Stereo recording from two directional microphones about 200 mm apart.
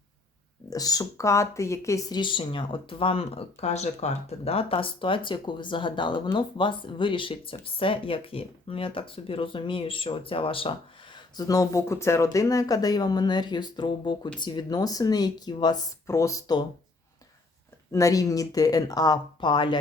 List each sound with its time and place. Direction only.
0.7 s speech: 20° left (ahead or behind)
17.9 s speech: 15° left (ahead or behind)